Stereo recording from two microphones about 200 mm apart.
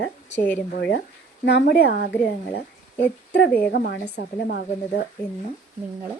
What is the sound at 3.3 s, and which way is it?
A woman's voice, 50° left (ahead or behind).